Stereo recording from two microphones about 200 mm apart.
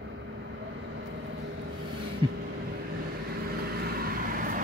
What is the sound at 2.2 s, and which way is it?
Vehicle, 25° right (ahead or behind).